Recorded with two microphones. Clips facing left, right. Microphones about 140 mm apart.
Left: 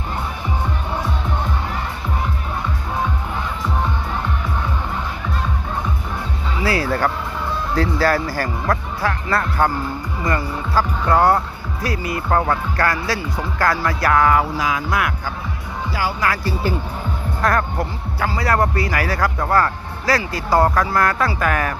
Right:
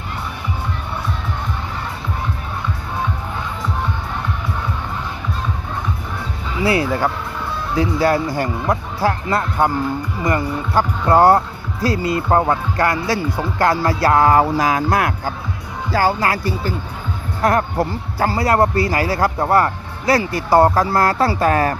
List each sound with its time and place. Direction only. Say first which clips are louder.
6.6 s speech: right 2 dB; 25° right (ahead or behind)
9.0 s music: right 3 dB; 30° right (ahead or behind)
9.6 s speech: right 2 dB; 15° right (ahead or behind)
14.0 s music: right 3 dB; 30° right (ahead or behind)
15.9 s speech: right 7 dB; 45° right (ahead or behind)
16.2 s speech: right 1 dB; 25° right (ahead or behind)